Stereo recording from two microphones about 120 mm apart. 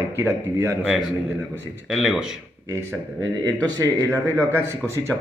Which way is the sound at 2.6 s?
25° right (ahead or behind).